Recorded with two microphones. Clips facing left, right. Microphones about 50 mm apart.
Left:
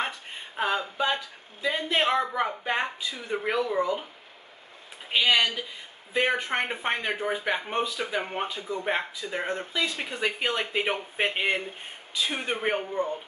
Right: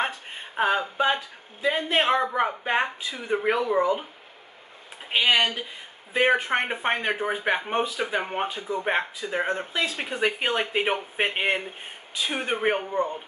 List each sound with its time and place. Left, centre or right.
0.0 s speech: centre
5.1 s speech: centre